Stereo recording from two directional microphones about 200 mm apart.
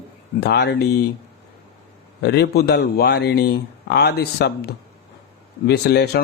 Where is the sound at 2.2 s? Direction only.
55° left (ahead or behind).